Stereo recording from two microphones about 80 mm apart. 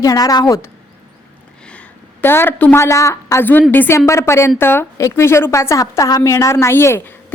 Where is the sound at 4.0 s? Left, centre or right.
Left.